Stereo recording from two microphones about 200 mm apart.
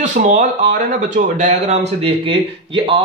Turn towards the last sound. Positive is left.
turn(degrees=-25)  # may be behind; listen again after turning